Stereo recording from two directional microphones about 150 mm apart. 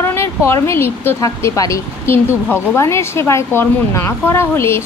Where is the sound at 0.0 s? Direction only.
15° left (ahead or behind).